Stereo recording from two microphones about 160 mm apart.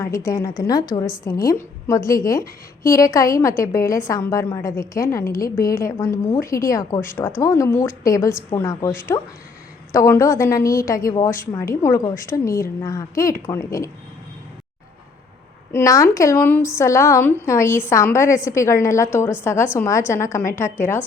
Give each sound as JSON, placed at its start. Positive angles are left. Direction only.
{"t": 0.3, "sound": "a woman's voice", "side_deg": 20}
{"t": 15.7, "sound": "a woman's voice", "side_deg": 20}